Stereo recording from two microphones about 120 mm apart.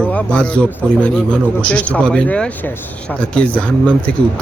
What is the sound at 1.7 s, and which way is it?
A man's voice, 10° left (ahead or behind).